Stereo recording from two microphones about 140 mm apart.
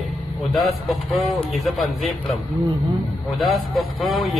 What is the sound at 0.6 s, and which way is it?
A man's voice, centre (ahead or behind).